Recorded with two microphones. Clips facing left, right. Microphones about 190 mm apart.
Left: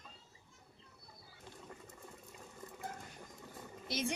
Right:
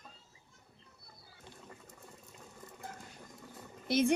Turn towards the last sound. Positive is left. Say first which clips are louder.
# right 9 dB
turn(degrees=-55)  # may be behind; listen again after turning